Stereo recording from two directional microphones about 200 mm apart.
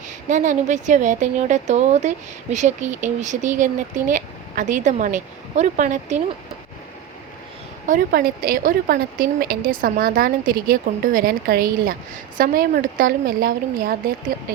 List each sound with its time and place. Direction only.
0.3 s a woman's voice: 40° right (ahead or behind)
7.9 s speech: 45° right (ahead or behind)